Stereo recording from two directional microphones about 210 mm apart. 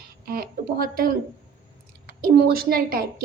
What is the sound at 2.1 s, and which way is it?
Speech, 45° right (ahead or behind).